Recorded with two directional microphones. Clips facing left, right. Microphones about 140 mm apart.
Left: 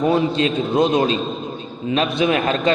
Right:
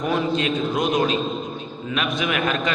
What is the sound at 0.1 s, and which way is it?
A man's voice, 30° left (ahead or behind).